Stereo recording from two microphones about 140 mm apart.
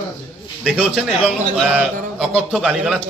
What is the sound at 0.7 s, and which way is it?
A man's voice, 5° right (ahead or behind).